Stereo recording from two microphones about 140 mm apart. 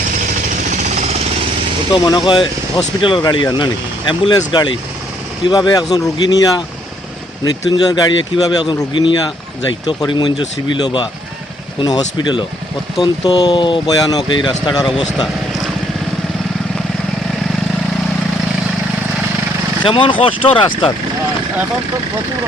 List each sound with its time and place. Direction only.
0.7 s jackhammer: 55° right (ahead or behind)
1.9 s speech: 30° left (ahead or behind)
19.8 s speech: 35° left (ahead or behind)